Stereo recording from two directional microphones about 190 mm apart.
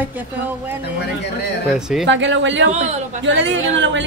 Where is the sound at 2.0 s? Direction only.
75° right (ahead or behind).